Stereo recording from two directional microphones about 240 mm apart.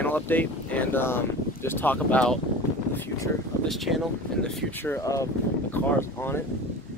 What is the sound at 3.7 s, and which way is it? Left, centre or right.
Speech, centre.